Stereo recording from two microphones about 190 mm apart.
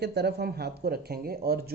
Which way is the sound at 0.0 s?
60° right (ahead or behind).